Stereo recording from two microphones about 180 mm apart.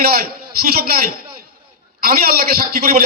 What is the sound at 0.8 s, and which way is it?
A man's voice, 55° right (ahead or behind).